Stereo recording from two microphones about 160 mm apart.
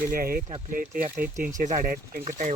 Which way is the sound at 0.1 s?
65° right (ahead or behind).